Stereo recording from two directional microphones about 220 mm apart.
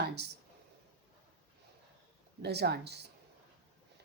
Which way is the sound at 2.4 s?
50° right (ahead or behind).